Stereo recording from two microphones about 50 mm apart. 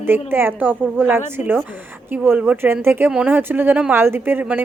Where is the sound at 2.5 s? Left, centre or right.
Right.